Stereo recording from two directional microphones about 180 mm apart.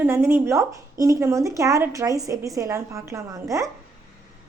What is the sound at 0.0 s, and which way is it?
Speech, 15° right (ahead or behind).